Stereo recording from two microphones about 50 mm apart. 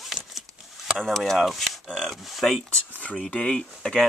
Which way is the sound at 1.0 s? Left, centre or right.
Centre.